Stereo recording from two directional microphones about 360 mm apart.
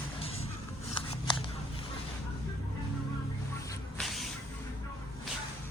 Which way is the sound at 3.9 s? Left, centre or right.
Centre.